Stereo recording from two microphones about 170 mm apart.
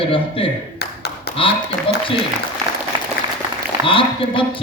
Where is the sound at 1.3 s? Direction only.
70° left (ahead or behind).